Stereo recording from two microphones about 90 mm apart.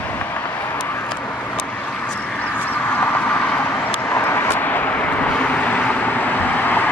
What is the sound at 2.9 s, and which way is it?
Vehicle, 20° left (ahead or behind).